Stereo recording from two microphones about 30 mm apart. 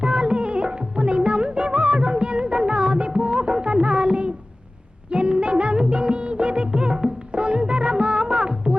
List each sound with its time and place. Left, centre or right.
0.0 s music: right
5.1 s music of bollywood: right
7.3 s music: right